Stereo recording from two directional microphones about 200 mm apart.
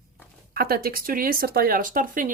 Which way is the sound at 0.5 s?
50° right (ahead or behind).